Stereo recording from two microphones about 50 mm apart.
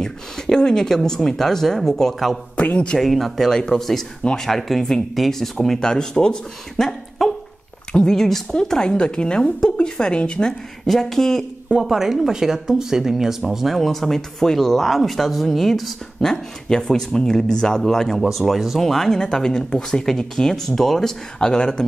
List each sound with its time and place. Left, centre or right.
0.0 s speech: centre
2.5 s a man's voice: left
3.0 s speech: centre
10.9 s speech: centre
11.8 s speech: centre